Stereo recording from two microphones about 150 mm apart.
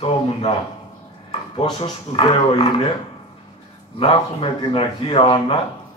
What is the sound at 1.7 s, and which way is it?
Speech, 35° left (ahead or behind).